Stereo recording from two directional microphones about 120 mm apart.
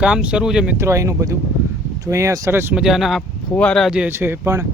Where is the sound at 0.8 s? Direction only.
25° right (ahead or behind).